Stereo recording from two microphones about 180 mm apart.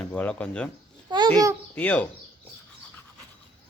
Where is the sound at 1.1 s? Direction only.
25° right (ahead or behind).